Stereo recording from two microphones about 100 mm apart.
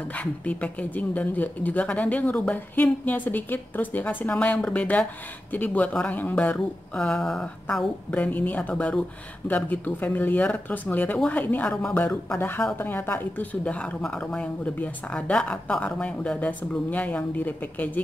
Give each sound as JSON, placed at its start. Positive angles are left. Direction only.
{"t": 0.1, "sound": "speech", "side_deg": 15}